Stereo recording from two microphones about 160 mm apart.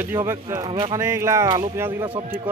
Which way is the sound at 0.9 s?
15° right (ahead or behind).